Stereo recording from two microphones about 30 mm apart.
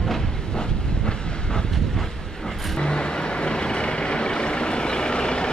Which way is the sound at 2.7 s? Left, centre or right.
Left.